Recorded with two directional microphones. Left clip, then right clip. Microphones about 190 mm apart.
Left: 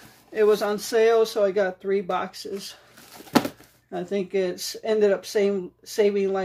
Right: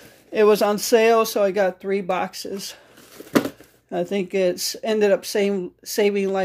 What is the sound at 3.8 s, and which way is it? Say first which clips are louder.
Speech: right 4 dB; 40° right (ahead or behind).